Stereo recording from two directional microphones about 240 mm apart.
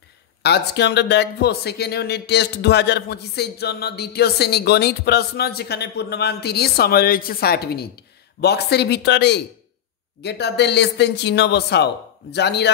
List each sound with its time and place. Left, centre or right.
0.4 s speech: left